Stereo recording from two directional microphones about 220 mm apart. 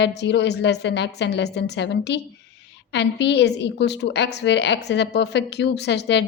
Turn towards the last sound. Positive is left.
turn(degrees=50)  # may be behind; listen again after turning